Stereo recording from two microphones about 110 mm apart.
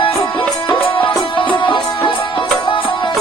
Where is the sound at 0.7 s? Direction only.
55° left (ahead or behind).